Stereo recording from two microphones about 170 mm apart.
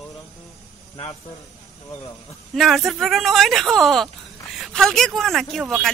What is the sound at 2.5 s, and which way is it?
Speech, centre (ahead or behind).